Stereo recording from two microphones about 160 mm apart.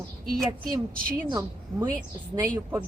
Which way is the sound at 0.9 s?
65° right (ahead or behind).